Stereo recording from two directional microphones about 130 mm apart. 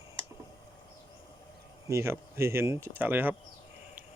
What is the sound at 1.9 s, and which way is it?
Speech, 20° right (ahead or behind).